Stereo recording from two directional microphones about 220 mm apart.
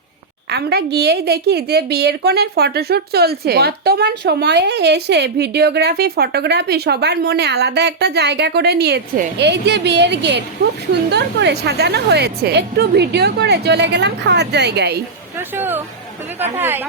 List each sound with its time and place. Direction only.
0.5 s a woman's voice: 50° right (ahead or behind)
15.4 s a woman's voice: 10° right (ahead or behind)